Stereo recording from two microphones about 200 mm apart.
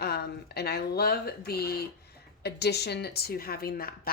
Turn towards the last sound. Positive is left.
turn(degrees=50)  # may be behind; listen again after turning